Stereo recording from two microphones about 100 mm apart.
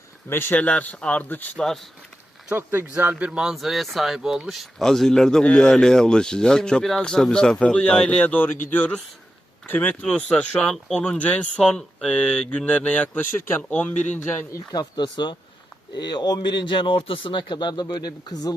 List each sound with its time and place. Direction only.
0.3 s speech: 20° left (ahead or behind)
1.5 s speech: 5° left (ahead or behind)
2.6 s speech: 15° right (ahead or behind); by 14.6 s 25° left (ahead or behind)
14.7 s speech: 45° left (ahead or behind)